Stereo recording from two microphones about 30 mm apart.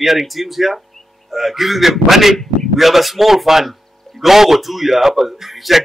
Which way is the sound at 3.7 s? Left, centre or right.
Centre.